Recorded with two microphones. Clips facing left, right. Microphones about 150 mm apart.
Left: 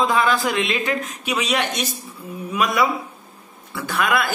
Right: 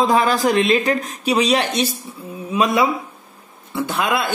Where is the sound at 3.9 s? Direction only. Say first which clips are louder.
Left 1 dB; 25° right (ahead or behind).